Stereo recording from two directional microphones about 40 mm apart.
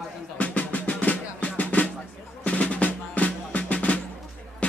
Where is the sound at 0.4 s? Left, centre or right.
Left.